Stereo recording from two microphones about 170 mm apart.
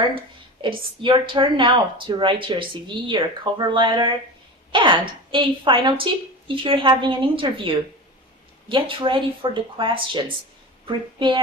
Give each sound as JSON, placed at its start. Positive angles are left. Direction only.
{"t": 0.6, "sound": "a woman's voice", "side_deg": -30}
{"t": 8.7, "sound": "a woman's voice", "side_deg": -30}